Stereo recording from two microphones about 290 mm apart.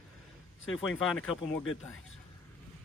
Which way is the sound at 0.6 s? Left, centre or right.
Left.